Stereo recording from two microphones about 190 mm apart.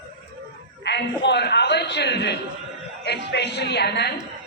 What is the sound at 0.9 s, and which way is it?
A man's voice, 65° left (ahead or behind).